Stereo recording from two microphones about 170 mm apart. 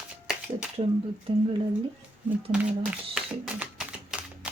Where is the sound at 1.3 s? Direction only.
35° right (ahead or behind).